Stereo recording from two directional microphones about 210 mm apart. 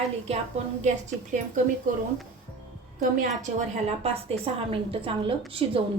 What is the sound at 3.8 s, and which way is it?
A woman's voice, 30° right (ahead or behind).